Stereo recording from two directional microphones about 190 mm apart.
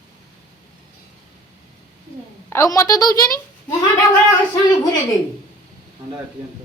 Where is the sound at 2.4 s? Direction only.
15° left (ahead or behind).